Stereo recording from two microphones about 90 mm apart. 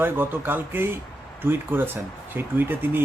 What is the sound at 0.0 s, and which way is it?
Speech, 25° right (ahead or behind).